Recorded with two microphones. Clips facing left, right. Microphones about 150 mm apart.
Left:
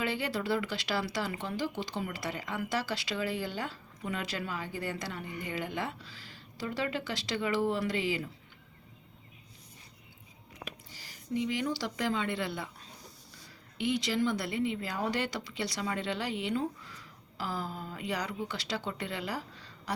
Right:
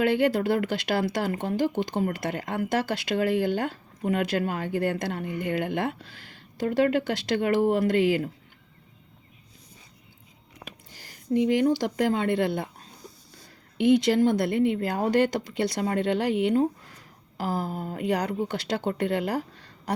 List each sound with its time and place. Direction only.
0.0 s speech: 55° right (ahead or behind)
10.9 s speech: 50° right (ahead or behind)
13.7 s speech: 55° right (ahead or behind)